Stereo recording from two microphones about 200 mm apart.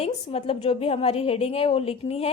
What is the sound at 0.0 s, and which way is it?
A woman's voice, 30° left (ahead or behind).